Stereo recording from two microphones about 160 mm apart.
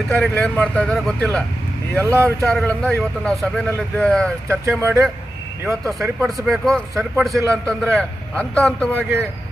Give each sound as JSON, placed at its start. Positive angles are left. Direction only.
{"t": 0.1, "sound": "a man's voice", "side_deg": 5}
{"t": 2.0, "sound": "speech", "side_deg": -15}
{"t": 2.4, "sound": "a man's voice", "side_deg": 5}
{"t": 4.4, "sound": "speech", "side_deg": -15}
{"t": 5.9, "sound": "a man's voice", "side_deg": 0}
{"t": 6.9, "sound": "a man's voice", "side_deg": -15}
{"t": 7.6, "sound": "a man's voice", "side_deg": 5}